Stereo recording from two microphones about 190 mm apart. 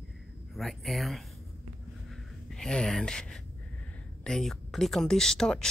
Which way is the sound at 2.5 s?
5° left (ahead or behind).